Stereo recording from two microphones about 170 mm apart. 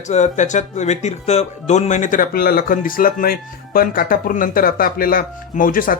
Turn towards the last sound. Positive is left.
turn(degrees=55)  # may be behind; listen again after turning